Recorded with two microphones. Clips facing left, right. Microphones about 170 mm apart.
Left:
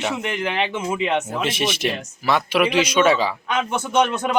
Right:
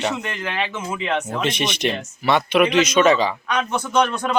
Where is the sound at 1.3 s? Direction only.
5° left (ahead or behind).